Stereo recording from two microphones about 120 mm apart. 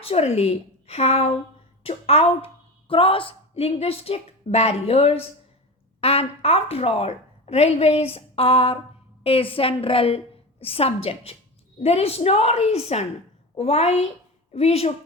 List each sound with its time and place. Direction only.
0.0 s a woman's voice: 55° left (ahead or behind)